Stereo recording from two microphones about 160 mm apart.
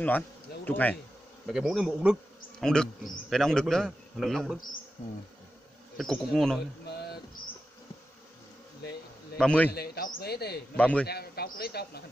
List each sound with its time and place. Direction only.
0.7 s a man's voice: 10° left (ahead or behind)
1.5 s a man's voice: 5° right (ahead or behind)
5.9 s a man's voice: 5° left (ahead or behind)
9.4 s a man's voice: 5° left (ahead or behind)
9.7 s speech: 75° left (ahead or behind)
10.8 s a man's voice: 10° left (ahead or behind)
11.1 s speech: 80° left